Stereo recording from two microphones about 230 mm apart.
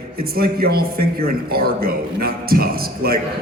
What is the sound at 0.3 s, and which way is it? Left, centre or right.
A man's voice, right.